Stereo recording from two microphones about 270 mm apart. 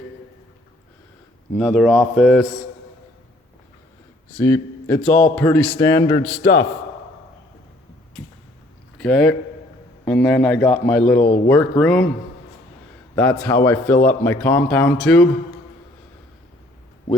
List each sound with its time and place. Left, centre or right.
1.5 s a man's voice: centre
4.4 s a man's voice: centre
6.4 s a man's voice: left
9.0 s a man's voice: centre
13.1 s a man's voice: centre